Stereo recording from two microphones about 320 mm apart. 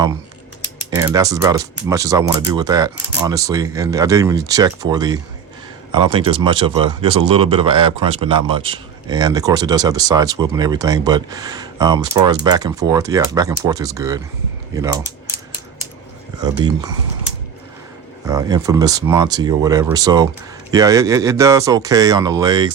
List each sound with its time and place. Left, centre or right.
0.9 s speech: centre
16.4 s speech: centre
18.3 s speech: centre